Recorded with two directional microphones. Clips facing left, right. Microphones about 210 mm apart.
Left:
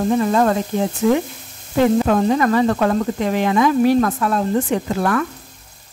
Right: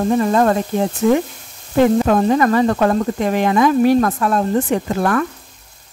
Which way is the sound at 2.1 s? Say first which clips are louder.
Right 2 dB; 45° right (ahead or behind).